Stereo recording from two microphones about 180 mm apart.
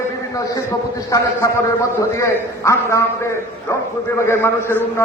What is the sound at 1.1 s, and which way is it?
A man's voice, 15° left (ahead or behind).